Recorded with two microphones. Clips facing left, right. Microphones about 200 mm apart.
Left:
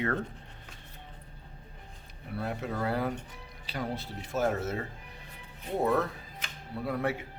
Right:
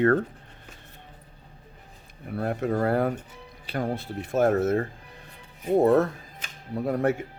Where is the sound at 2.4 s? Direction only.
50° right (ahead or behind).